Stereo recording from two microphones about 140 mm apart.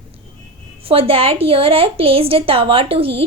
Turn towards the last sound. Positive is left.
turn(degrees=-40)  # may be behind; listen again after turning